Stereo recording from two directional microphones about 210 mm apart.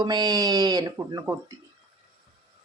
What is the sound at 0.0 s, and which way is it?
Speech, 20° right (ahead or behind).